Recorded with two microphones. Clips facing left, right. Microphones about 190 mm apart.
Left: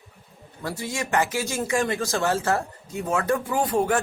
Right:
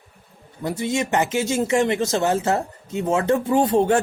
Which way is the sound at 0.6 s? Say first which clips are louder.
Right 7 dB; 20° right (ahead or behind).